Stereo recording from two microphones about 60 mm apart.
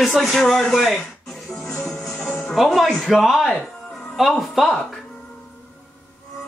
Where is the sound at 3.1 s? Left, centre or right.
Centre.